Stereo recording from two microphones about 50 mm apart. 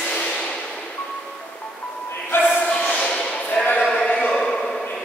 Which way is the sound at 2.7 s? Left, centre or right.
Centre.